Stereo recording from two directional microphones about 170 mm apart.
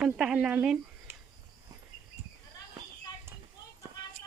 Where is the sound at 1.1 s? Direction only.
15° right (ahead or behind).